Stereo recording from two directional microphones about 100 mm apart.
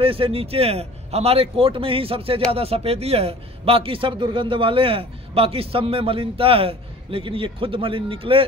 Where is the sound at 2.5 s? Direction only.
85° right.